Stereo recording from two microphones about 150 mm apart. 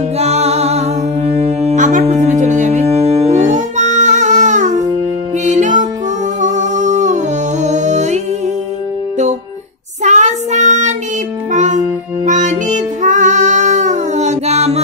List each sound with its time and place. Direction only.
0.2 s music: 45° right (ahead or behind)
10.0 s child singing: 50° right (ahead or behind)
11.5 s music: 55° right (ahead or behind)